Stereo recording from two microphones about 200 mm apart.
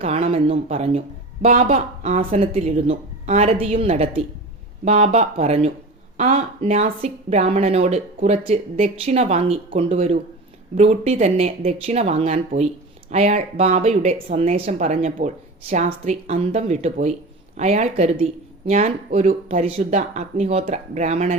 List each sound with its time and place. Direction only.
0.0 s speech: 30° right (ahead or behind)